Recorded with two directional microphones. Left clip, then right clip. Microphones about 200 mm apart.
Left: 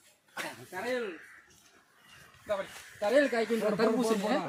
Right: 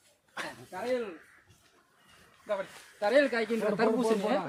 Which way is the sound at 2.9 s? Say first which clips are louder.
Right 1 dB; 5° left (ahead or behind).